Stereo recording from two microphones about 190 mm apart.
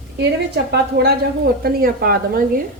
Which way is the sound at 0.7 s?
60° right (ahead or behind).